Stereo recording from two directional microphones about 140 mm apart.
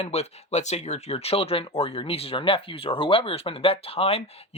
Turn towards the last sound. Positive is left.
turn(degrees=45)  # may be behind; listen again after turning